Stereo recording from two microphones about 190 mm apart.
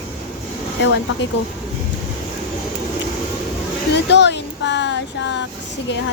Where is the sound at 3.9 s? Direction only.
65° left (ahead or behind).